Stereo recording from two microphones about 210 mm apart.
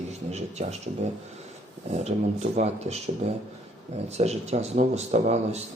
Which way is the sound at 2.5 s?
30° right (ahead or behind).